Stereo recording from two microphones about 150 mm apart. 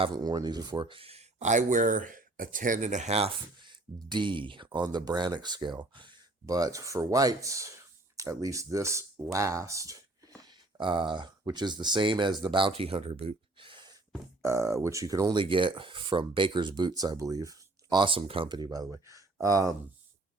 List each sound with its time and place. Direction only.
0.0 s speech: 30° right (ahead or behind)
14.4 s speech: 20° right (ahead or behind)